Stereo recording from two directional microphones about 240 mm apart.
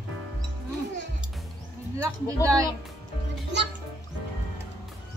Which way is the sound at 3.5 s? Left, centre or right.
Right.